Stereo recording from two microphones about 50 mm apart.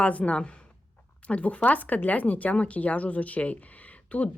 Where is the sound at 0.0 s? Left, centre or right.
Left.